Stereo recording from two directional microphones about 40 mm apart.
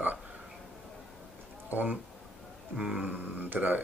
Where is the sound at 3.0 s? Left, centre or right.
Right.